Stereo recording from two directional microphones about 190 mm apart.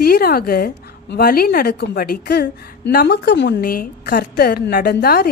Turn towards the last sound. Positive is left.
turn(degrees=55)  # may be behind; listen again after turning